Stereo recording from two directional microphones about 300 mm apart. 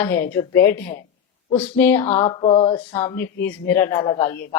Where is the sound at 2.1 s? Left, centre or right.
Centre.